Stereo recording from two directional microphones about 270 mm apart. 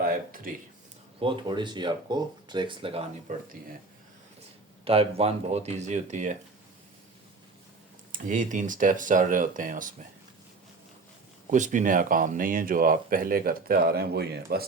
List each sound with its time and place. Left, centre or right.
0.0 s a sound: right
1.2 s speech: centre
4.9 s speech: right
8.1 s speech: right
11.5 s speech: right